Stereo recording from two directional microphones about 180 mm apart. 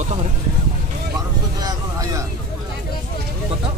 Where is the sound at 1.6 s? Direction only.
20° right (ahead or behind).